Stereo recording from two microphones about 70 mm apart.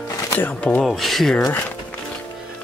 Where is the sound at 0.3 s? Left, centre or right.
Left.